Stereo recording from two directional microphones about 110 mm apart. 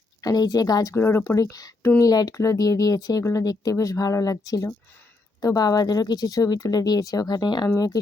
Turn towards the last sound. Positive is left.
turn(degrees=40)  # may be behind; listen again after turning